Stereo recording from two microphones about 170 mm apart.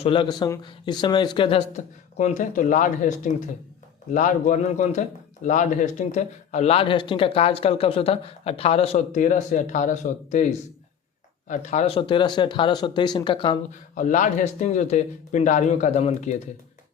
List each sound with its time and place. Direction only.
0.0 s speech: 30° left (ahead or behind)
1.7 s speech: 45° left (ahead or behind); by 13.6 s 30° left (ahead or behind)
13.9 s speech: 50° left (ahead or behind)